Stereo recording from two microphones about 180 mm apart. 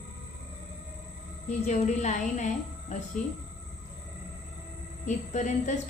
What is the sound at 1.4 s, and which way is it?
A woman's voice, 40° left (ahead or behind).